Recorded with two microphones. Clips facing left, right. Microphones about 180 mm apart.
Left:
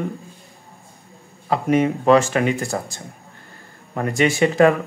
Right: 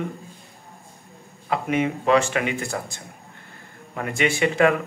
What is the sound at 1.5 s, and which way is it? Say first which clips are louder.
Speech: left 5 dB; 40° left (ahead or behind).